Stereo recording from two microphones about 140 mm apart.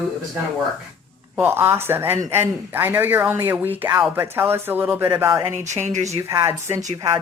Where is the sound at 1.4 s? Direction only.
15° right (ahead or behind).